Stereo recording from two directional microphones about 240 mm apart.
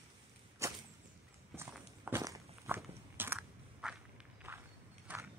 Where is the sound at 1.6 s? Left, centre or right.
Centre.